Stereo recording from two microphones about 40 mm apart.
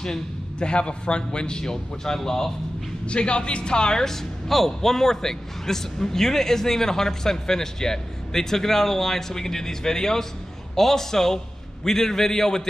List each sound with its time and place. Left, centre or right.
0.0 s a man's voice: left
3.1 s a man's voice: left